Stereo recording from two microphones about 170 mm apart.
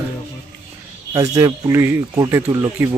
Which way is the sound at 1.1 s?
20° right (ahead or behind).